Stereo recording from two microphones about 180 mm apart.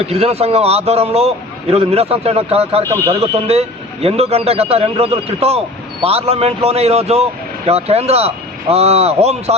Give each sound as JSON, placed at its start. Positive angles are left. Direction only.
{"t": 0.0, "sound": "a man's voice", "side_deg": -35}